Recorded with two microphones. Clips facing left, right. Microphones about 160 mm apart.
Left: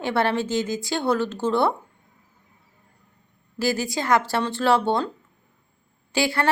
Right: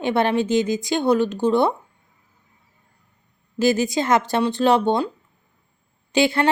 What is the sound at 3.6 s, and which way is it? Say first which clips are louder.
A woman's voice: right 5 dB; 20° right (ahead or behind).